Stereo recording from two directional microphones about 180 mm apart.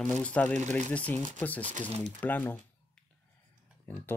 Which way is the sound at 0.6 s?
40° right (ahead or behind).